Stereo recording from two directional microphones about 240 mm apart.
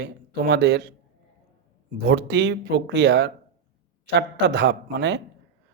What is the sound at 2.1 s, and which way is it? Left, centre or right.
Speech, right.